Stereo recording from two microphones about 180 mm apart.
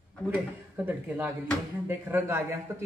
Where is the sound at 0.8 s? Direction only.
10° right (ahead or behind).